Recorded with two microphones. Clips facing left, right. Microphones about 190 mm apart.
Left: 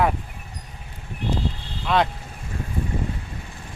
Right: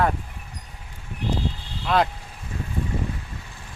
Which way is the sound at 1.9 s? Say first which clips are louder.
Even; centre (ahead or behind).